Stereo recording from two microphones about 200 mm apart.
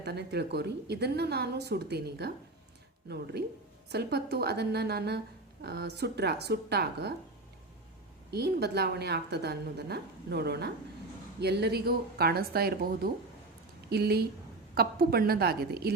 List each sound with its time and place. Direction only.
0.0 s a woman's voice: 55° right (ahead or behind)
3.8 s a woman's voice: 55° right (ahead or behind)
8.3 s a woman's voice: 55° right (ahead or behind)